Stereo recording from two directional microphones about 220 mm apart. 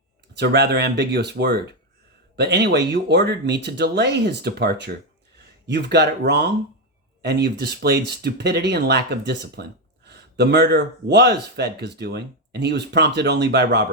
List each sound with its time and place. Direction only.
0.3 s speech: 50° right (ahead or behind)